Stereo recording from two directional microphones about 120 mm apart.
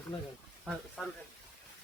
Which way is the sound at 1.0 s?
Centre (ahead or behind).